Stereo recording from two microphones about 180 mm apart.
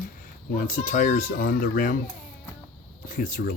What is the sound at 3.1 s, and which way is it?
Speech, 50° left (ahead or behind).